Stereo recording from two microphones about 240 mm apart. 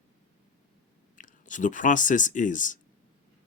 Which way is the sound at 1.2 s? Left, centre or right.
Left.